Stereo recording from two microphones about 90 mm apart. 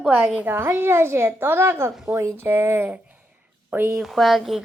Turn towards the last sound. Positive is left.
turn(degrees=0)  # may be behind; listen again after turning